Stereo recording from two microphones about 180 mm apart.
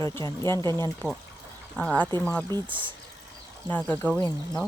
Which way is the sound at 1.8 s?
5° left (ahead or behind).